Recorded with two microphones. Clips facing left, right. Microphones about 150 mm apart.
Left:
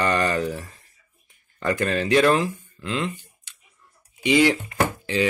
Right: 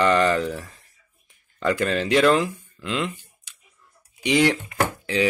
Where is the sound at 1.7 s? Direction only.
Centre (ahead or behind).